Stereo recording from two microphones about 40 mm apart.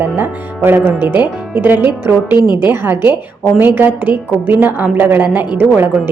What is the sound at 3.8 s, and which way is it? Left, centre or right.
A woman's voice, right.